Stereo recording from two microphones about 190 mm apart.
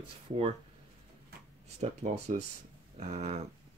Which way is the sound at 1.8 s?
35° right (ahead or behind).